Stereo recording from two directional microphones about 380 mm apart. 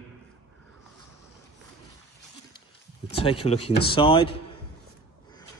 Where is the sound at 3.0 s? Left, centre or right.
Centre.